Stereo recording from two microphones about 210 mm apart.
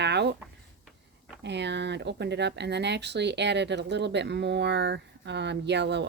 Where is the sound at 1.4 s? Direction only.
55° right (ahead or behind).